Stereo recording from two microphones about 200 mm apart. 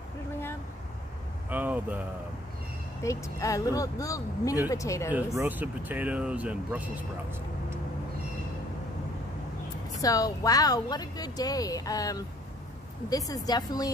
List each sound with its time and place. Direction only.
1.5 s a sound: 10° right (ahead or behind)
3.0 s speech: 15° left (ahead or behind)
5.1 s speech: 10° right (ahead or behind)
10.0 s speech: 20° left (ahead or behind)